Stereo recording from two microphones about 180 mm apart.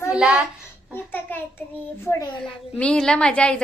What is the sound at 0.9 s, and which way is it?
A child's voice, 10° left (ahead or behind).